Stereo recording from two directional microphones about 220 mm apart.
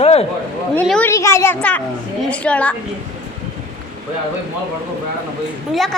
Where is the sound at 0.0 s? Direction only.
25° left (ahead or behind).